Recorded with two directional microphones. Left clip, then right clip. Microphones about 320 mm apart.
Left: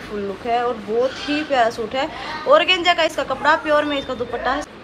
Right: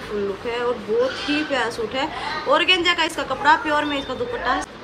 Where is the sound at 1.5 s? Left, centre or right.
Centre.